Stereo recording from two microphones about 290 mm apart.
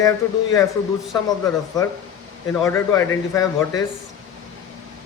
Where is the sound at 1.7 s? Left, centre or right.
Centre.